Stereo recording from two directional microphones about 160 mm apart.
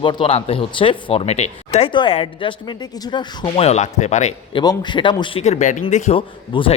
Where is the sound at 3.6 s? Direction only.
45° left (ahead or behind).